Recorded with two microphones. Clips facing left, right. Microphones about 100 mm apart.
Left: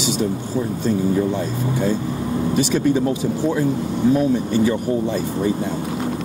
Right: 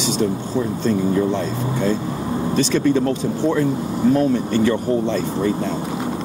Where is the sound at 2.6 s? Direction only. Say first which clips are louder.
Right 1 dB; 10° left (ahead or behind).